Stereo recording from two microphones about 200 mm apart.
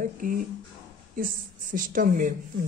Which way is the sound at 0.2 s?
45° right (ahead or behind).